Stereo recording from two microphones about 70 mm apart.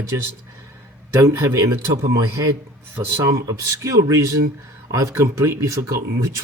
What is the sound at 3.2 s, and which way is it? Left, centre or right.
Speech, right.